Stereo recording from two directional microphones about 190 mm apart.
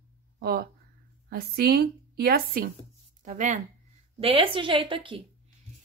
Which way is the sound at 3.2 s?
40° right (ahead or behind).